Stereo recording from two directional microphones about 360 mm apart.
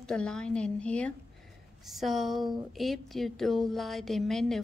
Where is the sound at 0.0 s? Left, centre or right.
Centre.